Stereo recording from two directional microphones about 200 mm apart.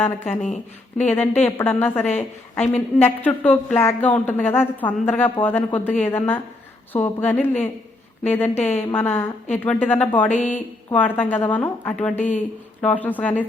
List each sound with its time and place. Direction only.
1.1 s a woman's voice: 10° left (ahead or behind)
10.2 s speech: 35° left (ahead or behind)
10.9 s a woman's voice: 10° left (ahead or behind)
12.1 s speech: 35° left (ahead or behind)
12.8 s a woman's voice: 10° left (ahead or behind)